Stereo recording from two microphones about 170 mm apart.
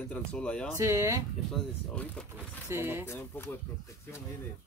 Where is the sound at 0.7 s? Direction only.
20° right (ahead or behind).